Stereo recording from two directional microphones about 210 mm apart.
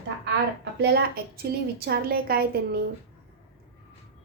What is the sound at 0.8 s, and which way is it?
A woman's voice, 50° right (ahead or behind).